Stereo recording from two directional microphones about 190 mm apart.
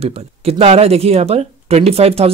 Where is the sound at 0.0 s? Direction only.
30° right (ahead or behind).